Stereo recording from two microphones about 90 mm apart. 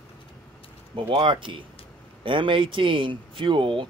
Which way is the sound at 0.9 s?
70° right (ahead or behind).